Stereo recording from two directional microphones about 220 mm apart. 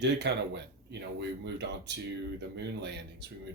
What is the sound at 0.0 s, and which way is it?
Speech, 50° right (ahead or behind).